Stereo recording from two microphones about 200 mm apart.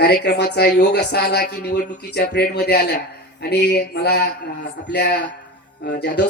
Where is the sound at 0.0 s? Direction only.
55° left (ahead or behind).